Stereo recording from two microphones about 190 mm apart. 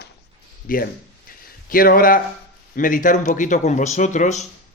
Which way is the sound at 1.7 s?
50° left (ahead or behind).